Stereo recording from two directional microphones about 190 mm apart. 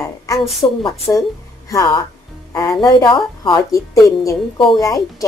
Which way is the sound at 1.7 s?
20° left (ahead or behind).